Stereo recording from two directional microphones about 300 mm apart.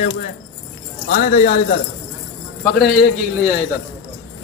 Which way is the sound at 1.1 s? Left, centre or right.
Left.